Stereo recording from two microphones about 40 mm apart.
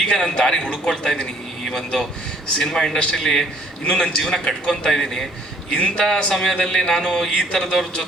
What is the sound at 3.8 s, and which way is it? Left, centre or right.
A man's voice, left.